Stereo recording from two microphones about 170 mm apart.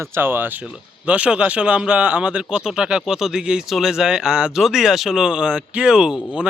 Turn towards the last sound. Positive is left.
turn(degrees=-5)  # may be behind; listen again after turning